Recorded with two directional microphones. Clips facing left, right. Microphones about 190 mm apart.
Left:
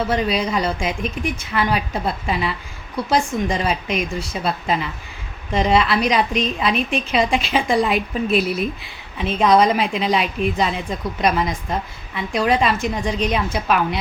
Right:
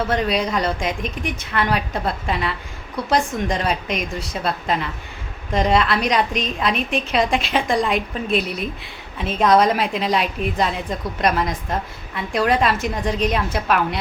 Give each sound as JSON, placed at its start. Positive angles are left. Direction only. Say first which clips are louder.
{"t": 0.0, "sound": "a woman's voice", "louder": "even", "side_deg": 0}